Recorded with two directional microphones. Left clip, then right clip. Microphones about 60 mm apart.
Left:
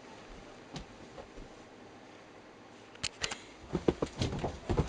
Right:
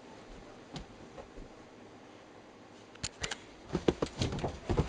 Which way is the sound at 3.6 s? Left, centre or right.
Centre.